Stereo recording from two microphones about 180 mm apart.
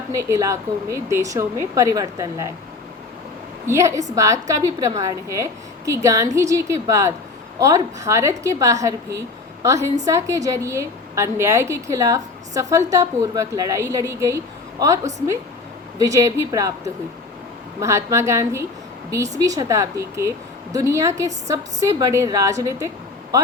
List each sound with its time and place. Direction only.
0.2 s a woman's voice: 15° right (ahead or behind)
3.7 s a woman's voice: 15° right (ahead or behind)